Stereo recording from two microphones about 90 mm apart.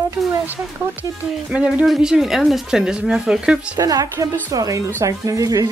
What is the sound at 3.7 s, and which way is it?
Speech, 45° right (ahead or behind).